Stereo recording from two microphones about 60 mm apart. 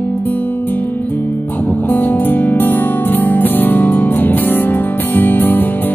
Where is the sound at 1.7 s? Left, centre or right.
Left.